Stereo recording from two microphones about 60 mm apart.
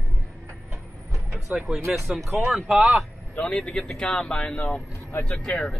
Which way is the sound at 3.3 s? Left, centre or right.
Centre.